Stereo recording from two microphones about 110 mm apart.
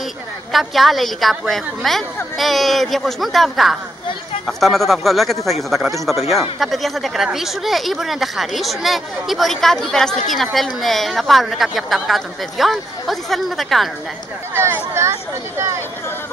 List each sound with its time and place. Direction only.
0.5 s speech: centre (ahead or behind)
14.5 s speech: 20° right (ahead or behind)